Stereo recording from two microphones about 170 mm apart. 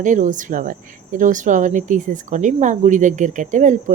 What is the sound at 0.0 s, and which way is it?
Speech, 50° right (ahead or behind).